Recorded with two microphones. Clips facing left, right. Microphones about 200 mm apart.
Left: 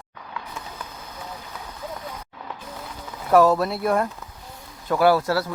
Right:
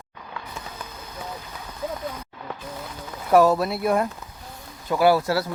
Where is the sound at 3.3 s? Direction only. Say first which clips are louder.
Even; 10° right (ahead or behind).